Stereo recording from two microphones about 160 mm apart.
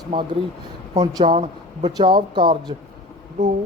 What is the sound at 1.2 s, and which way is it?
Speech, 35° right (ahead or behind).